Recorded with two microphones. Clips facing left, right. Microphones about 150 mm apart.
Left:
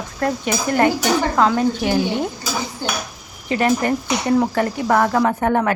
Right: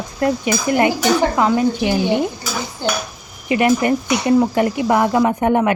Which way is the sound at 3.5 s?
10° right (ahead or behind).